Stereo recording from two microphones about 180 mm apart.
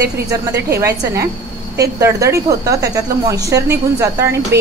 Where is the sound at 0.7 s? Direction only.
15° right (ahead or behind).